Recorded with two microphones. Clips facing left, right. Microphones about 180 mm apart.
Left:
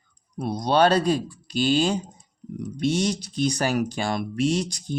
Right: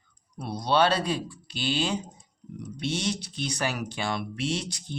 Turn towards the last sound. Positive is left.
turn(degrees=40)  # may be behind; listen again after turning